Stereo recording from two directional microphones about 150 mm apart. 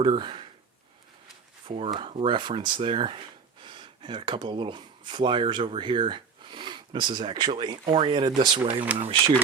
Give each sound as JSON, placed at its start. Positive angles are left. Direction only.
{"t": 0.0, "sound": "speech", "side_deg": -35}
{"t": 1.6, "sound": "speech", "side_deg": -40}
{"t": 8.9, "sound": "speech", "side_deg": -10}